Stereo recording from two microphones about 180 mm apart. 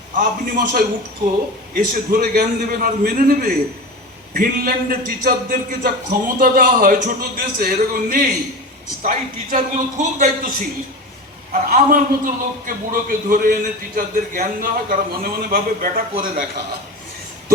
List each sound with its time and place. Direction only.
0.2 s a man's voice: 50° right (ahead or behind)
11.7 s a man's voice: 50° right (ahead or behind)